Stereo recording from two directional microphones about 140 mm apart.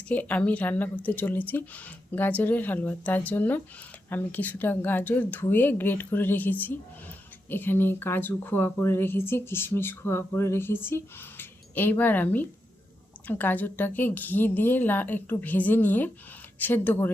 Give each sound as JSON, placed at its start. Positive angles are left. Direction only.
{"t": 0.1, "sound": "speech", "side_deg": 10}